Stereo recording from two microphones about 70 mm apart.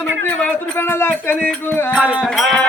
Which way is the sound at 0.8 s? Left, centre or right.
Left.